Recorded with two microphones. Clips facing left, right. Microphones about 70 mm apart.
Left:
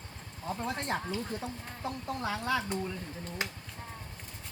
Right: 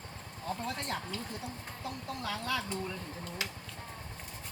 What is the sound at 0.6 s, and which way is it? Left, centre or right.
Speech, left.